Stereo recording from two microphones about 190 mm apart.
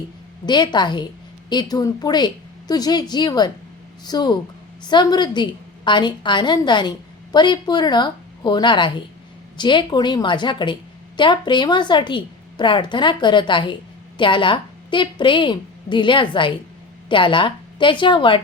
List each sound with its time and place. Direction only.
0.4 s a woman's voice: 25° left (ahead or behind)